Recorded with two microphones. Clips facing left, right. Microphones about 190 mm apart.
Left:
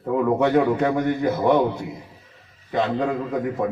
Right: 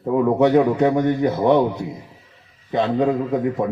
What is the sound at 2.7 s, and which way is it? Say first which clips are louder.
Speech: right 4 dB; 20° right (ahead or behind).